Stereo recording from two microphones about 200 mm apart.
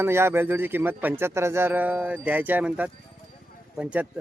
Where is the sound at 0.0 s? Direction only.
10° right (ahead or behind).